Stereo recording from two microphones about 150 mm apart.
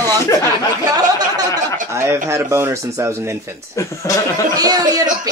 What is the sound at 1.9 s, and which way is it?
Speech, 15° right (ahead or behind).